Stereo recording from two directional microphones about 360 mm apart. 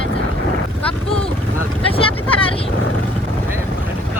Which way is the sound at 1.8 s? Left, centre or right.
Centre.